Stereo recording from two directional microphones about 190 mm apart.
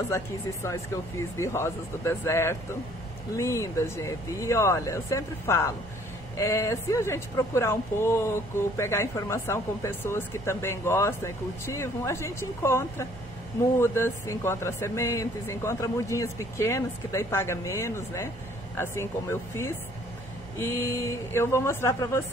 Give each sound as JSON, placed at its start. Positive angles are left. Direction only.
{"t": 0.1, "sound": "speech", "side_deg": 15}